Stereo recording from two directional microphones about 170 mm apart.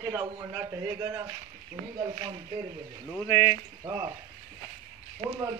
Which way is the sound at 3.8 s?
25° right (ahead or behind).